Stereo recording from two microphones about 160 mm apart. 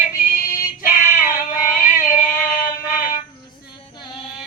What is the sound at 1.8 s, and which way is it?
Music, 55° left (ahead or behind).